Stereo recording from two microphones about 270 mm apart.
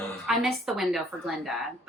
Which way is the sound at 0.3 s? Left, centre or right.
Centre.